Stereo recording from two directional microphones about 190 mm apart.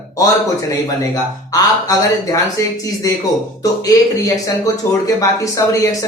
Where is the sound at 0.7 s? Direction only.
20° left (ahead or behind).